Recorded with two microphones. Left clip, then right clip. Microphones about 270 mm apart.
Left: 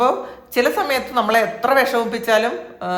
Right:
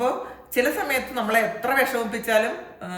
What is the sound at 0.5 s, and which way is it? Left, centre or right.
Speech, centre.